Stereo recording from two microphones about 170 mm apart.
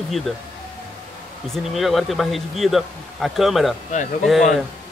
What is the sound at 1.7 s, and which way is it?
Speech, centre (ahead or behind).